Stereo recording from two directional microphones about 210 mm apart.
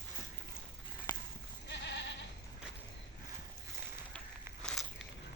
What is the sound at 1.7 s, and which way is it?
Goat, 55° left (ahead or behind).